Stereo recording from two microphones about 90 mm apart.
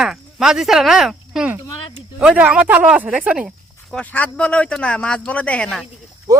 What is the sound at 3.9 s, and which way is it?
Speech, 15° left (ahead or behind).